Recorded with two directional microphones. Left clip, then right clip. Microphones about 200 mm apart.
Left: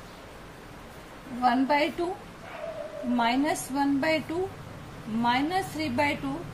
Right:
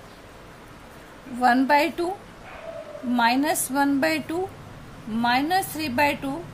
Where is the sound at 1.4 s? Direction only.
50° right (ahead or behind).